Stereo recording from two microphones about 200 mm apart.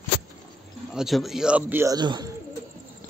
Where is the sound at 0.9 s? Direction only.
Centre (ahead or behind); by 2.3 s 20° right (ahead or behind).